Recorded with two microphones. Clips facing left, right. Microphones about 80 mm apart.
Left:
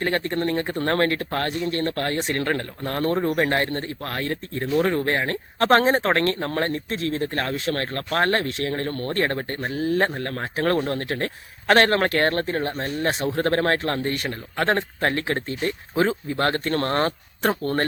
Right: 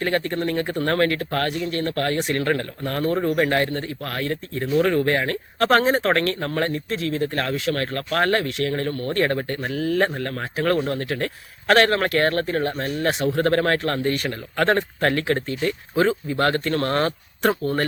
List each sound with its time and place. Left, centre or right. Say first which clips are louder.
0.0 s speech: right 1 dB; left